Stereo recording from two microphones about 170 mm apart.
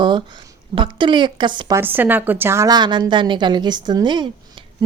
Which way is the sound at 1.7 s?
10° right (ahead or behind).